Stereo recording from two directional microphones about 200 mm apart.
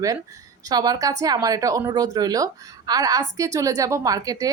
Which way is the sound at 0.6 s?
20° right (ahead or behind).